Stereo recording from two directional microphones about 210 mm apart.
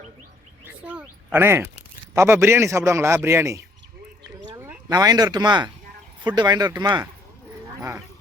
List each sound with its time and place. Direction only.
0.6 s a man's voice: 5° right (ahead or behind)